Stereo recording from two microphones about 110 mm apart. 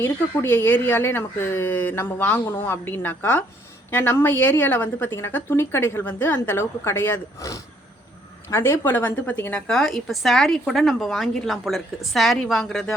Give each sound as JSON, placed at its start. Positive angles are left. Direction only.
{"t": 0.0, "sound": "a woman's voice", "side_deg": 20}